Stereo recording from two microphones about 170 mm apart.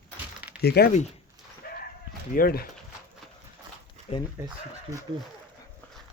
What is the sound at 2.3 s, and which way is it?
Speech, 60° left (ahead or behind).